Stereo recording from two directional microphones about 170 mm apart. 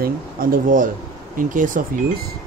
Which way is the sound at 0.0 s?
55° right (ahead or behind).